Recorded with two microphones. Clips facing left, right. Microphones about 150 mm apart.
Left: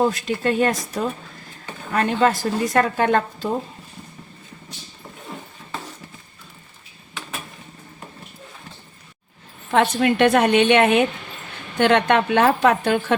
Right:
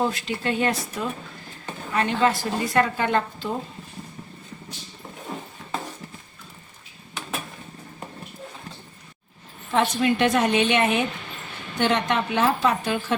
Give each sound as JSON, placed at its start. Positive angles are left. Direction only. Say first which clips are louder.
{"t": 0.1, "sound": "a woman's voice", "louder": "left 5 dB", "side_deg": 45}
{"t": 9.7, "sound": "a woman's voice", "louder": "left 4 dB", "side_deg": 60}